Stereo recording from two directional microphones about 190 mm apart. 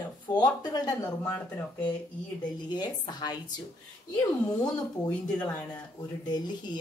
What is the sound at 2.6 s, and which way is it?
Speech, 25° left (ahead or behind).